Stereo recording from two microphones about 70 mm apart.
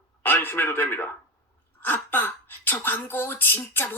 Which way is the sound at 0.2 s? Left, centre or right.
Left.